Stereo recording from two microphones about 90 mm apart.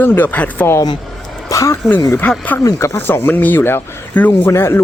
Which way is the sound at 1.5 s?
40° left (ahead or behind).